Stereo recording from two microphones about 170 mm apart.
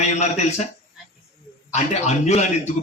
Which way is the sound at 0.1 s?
40° left (ahead or behind).